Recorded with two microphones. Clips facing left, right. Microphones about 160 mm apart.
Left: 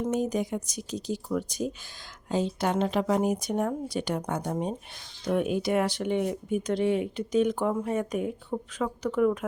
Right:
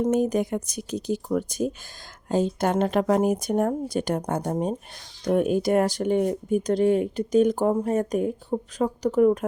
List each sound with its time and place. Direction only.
0.0 s speech: 50° right (ahead or behind)